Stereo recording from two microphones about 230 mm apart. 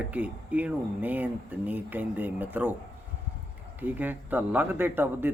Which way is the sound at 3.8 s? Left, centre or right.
Centre.